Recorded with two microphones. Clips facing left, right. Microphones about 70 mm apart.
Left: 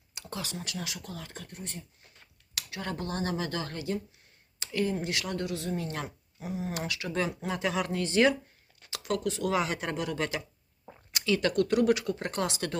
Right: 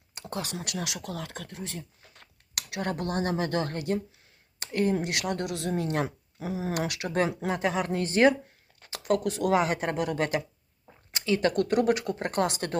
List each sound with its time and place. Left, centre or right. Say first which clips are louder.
0.1 s a sound: right 4 dB; right
0.5 s speech: right 3 dB; right
2.8 s speech: right 4 dB; right
6.4 s speech: right 4 dB; right
6.7 s speech: right 5 dB; right
7.4 s speech: right 3 dB; right